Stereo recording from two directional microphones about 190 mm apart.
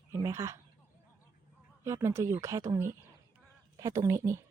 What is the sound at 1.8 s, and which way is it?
A woman's voice, 15° right (ahead or behind).